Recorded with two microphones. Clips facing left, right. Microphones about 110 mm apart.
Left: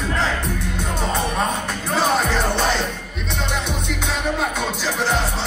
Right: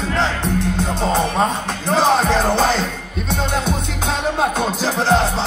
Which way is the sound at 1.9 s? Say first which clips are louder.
Right 5 dB; 35° right (ahead or behind).